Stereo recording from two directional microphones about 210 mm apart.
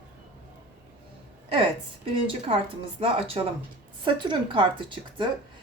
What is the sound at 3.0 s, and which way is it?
Speech, 25° right (ahead or behind).